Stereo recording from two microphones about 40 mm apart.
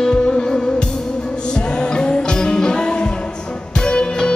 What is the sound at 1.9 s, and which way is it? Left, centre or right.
Music, left.